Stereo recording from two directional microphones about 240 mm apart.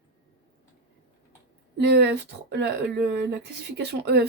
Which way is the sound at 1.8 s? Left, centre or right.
Right.